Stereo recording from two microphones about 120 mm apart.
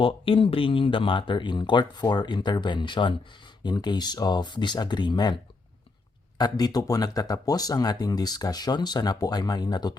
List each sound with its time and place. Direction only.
0.0 s speech: 50° left (ahead or behind)